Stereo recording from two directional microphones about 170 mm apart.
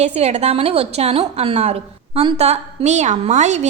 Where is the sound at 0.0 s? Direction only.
40° right (ahead or behind).